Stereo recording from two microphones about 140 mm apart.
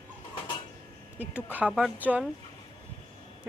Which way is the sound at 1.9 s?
10° right (ahead or behind).